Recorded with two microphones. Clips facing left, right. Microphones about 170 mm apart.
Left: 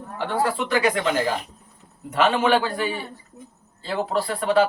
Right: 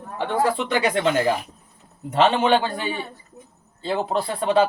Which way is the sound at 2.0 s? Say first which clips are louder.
Right 2 dB; 25° right (ahead or behind).